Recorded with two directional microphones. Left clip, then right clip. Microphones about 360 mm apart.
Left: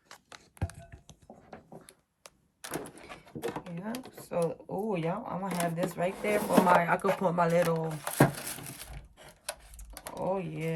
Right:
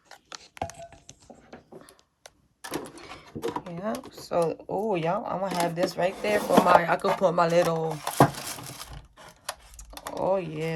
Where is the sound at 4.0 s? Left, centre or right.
Centre.